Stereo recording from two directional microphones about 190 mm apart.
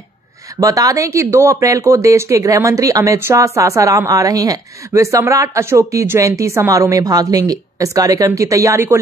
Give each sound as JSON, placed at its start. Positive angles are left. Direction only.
{"t": 0.6, "sound": "speech", "side_deg": -20}